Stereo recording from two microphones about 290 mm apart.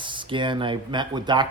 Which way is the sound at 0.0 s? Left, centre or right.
Centre.